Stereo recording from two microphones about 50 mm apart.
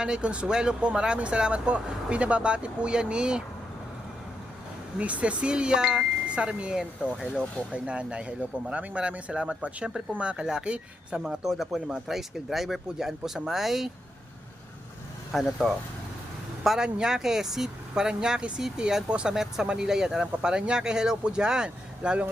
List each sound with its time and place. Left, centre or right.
0.0 s speech: centre
4.9 s speech: right; by 13.9 s centre
15.3 s speech: centre
16.6 s speech: centre